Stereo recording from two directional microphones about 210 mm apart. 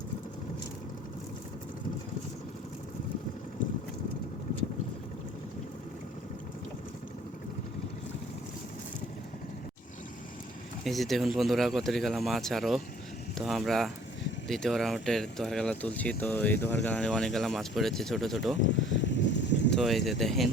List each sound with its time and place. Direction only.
10.8 s speech: centre (ahead or behind)
18.7 s a sound: 60° left (ahead or behind)
19.7 s speech: centre (ahead or behind)